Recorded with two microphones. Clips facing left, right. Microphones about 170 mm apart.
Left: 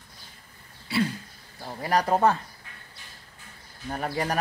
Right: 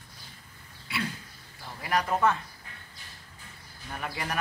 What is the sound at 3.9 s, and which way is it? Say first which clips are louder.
Speech: left 7 dB; 35° left (ahead or behind).